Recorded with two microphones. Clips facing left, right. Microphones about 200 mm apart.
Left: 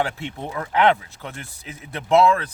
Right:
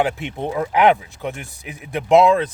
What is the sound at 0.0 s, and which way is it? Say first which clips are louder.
Speech: right 5 dB; 15° right (ahead or behind).